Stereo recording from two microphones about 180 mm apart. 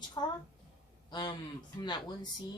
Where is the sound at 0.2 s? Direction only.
20° left (ahead or behind).